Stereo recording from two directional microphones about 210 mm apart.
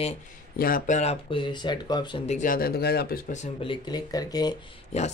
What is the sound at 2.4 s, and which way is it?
Speech, 45° left (ahead or behind).